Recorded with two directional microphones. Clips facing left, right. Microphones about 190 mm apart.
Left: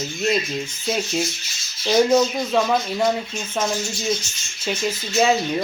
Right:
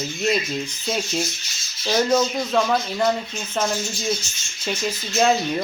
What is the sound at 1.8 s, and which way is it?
Speech, 10° left (ahead or behind).